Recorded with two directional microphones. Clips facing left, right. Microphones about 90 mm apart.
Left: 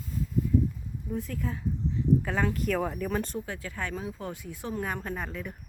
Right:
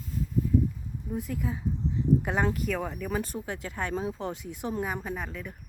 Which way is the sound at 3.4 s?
25° right (ahead or behind).